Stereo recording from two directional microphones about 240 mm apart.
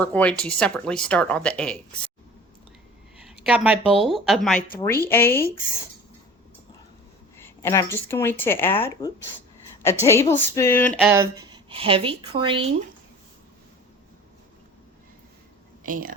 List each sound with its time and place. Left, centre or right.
0.0 s speech: centre
3.4 s speech: centre
7.3 s speech: centre
11.0 s a woman's voice: centre